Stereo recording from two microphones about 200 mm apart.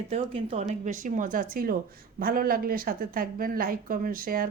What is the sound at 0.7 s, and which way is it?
Speech, 40° right (ahead or behind).